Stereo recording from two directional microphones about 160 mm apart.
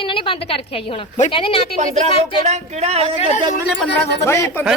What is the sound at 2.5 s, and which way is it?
Speech, 40° right (ahead or behind).